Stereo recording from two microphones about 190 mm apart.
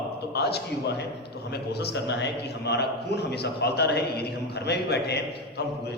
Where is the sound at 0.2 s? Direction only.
60° left (ahead or behind).